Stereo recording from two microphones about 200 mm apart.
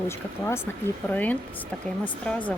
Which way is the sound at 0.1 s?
10° left (ahead or behind).